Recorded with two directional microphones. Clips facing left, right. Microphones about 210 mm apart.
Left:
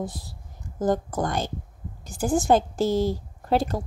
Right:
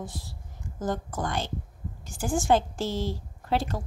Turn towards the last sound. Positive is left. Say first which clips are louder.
# left 5 dB
turn(degrees=40)  # may be behind; listen again after turning